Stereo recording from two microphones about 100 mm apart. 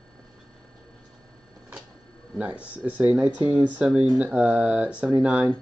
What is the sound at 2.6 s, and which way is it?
Speech, 15° right (ahead or behind).